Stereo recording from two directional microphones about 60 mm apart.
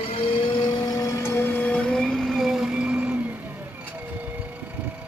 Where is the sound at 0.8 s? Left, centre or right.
Left.